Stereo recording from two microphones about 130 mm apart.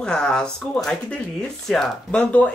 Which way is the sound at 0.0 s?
5° left (ahead or behind).